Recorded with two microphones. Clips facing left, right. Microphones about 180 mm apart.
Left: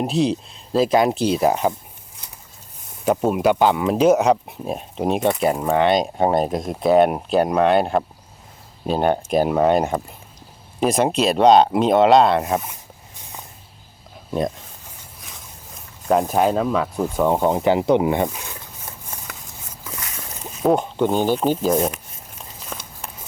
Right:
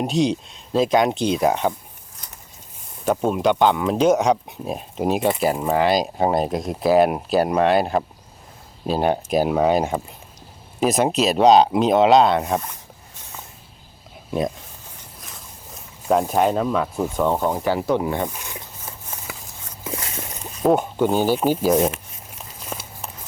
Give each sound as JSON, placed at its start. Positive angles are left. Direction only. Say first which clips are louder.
{"t": 0.0, "sound": "speech", "louder": "even", "side_deg": 0}
{"t": 3.0, "sound": "speech", "louder": "left 2 dB", "side_deg": 5}
{"t": 16.0, "sound": "speech", "louder": "left 1 dB", "side_deg": 0}
{"t": 17.2, "sound": "speech", "louder": "left 3 dB", "side_deg": 10}
{"t": 17.5, "sound": "rub", "louder": "left 4 dB", "side_deg": 20}
{"t": 19.3, "sound": "a sound", "louder": "right 2 dB", "side_deg": -5}
{"t": 19.8, "sound": "a sound", "louder": "right 6 dB", "side_deg": -30}
{"t": 20.4, "sound": "liquid", "louder": "even", "side_deg": 5}
{"t": 20.7, "sound": "speech", "louder": "even", "side_deg": -10}
{"t": 22.7, "sound": "a sound", "louder": "right 2 dB", "side_deg": -5}